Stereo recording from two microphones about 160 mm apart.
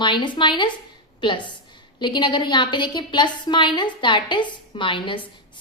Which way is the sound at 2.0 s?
30° left (ahead or behind).